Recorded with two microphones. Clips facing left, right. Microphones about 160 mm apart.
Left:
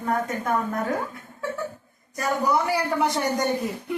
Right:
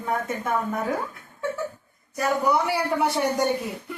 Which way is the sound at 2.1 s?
5° right (ahead or behind).